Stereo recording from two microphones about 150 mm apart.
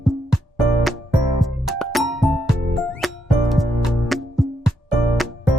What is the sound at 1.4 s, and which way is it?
Music, centre (ahead or behind).